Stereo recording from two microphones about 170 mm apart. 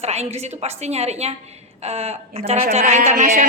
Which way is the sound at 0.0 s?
40° right (ahead or behind).